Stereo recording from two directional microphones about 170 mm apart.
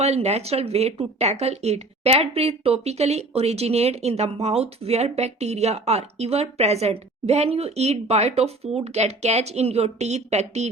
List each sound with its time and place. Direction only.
0.0 s speech: 40° right (ahead or behind)